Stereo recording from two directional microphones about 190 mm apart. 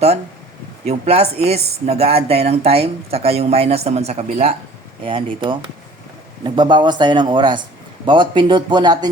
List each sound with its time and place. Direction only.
0.9 s speech: 35° right (ahead or behind)
5.0 s speech: 25° right (ahead or behind)